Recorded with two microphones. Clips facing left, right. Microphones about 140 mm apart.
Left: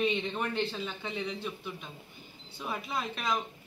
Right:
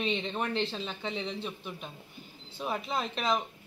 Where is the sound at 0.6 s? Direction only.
30° right (ahead or behind).